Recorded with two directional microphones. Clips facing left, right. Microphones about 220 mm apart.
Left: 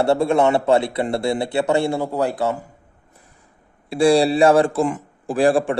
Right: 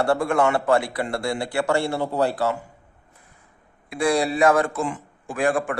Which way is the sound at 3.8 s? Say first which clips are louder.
Left 7 dB; 30° left (ahead or behind).